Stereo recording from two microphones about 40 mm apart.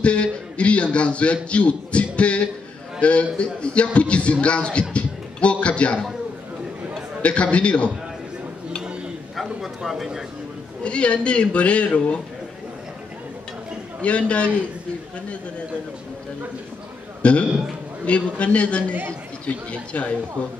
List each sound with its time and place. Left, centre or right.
0.0 s a sound: left
0.9 s a man's voice: left
7.2 s a man's voice: left
9.3 s a sound: centre
9.8 s speech: centre
10.8 s speech: left
14.0 s a man's voice: left
17.2 s a man's voice: left